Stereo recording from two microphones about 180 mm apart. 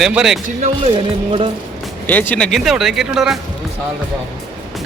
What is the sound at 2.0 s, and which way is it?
Speech, 10° left (ahead or behind).